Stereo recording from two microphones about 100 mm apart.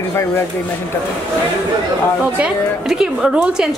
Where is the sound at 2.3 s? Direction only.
10° right (ahead or behind).